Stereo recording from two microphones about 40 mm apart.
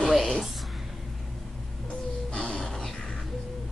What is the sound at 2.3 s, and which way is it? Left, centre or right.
Music, left.